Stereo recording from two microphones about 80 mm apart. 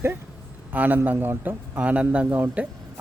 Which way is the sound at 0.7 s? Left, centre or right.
Right.